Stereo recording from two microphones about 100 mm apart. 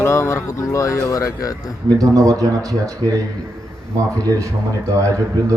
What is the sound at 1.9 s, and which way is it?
Speech, 35° right (ahead or behind).